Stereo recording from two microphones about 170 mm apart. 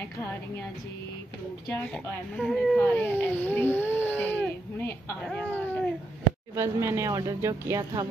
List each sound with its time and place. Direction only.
2.4 s speech: centre (ahead or behind)
6.5 s speech: 15° right (ahead or behind)